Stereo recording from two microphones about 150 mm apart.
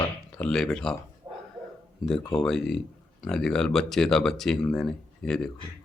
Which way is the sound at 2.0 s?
5° left (ahead or behind).